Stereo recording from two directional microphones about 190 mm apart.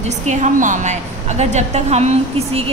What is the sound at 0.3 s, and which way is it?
A woman's voice, 40° right (ahead or behind).